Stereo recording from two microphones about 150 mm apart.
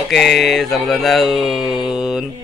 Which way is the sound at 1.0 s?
Centre (ahead or behind).